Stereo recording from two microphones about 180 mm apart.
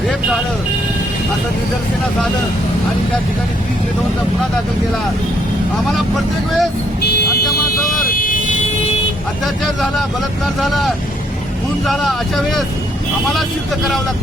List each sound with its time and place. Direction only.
5.9 s speech: centre (ahead or behind)
8.1 s vehicle: 50° left (ahead or behind)
10.6 s speech: centre (ahead or behind)